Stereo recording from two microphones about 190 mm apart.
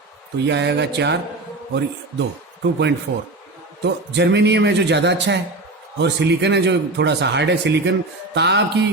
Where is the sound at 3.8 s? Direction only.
65° right (ahead or behind).